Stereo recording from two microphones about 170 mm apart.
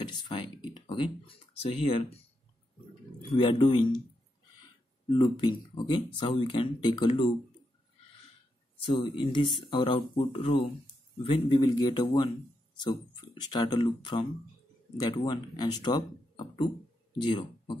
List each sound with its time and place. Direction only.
0.0 s speech: 25° left (ahead or behind)
3.3 s speech: 30° left (ahead or behind)
5.1 s speech: 25° left (ahead or behind)
8.9 s speech: 25° left (ahead or behind)